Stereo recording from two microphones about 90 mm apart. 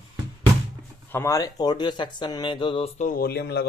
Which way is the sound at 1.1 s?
40° left (ahead or behind).